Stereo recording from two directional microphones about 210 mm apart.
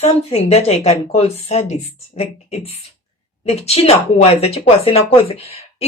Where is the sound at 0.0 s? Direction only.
30° left (ahead or behind).